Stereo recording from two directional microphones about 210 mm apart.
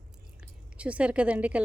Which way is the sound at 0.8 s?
5° right (ahead or behind).